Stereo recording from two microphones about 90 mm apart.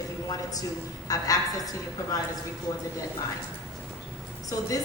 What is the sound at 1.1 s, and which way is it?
A woman's voice, 45° left (ahead or behind).